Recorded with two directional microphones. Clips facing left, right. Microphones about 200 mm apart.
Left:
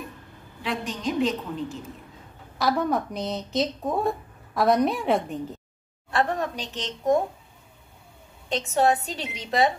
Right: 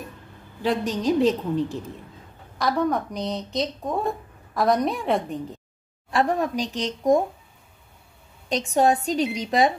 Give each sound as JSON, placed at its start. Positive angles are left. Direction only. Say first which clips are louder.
{"t": 0.6, "sound": "a woman's voice", "louder": "right 7 dB", "side_deg": -40}
{"t": 2.6, "sound": "a woman's voice", "louder": "right 1 dB", "side_deg": 0}
{"t": 6.1, "sound": "a woman's voice", "louder": "right 3 dB", "side_deg": -10}
{"t": 8.5, "sound": "a woman's voice", "louder": "right 2 dB", "side_deg": -15}